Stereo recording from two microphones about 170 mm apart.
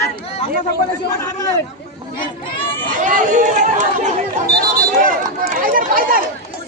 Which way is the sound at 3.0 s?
50° right (ahead or behind).